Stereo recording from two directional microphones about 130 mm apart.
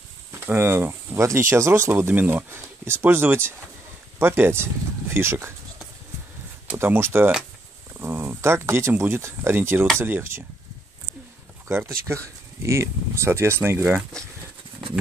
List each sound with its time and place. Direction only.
0.3 s speech: 15° right (ahead or behind)
6.7 s speech: 15° right (ahead or behind)
11.6 s a sound: 20° right (ahead or behind)
12.6 s speech: 20° right (ahead or behind)